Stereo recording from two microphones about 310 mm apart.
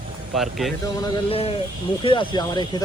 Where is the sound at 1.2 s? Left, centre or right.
Centre.